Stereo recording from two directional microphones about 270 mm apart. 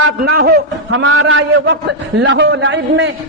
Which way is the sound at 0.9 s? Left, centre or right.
Right.